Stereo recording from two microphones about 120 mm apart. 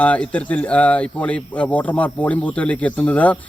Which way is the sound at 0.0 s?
10° left (ahead or behind).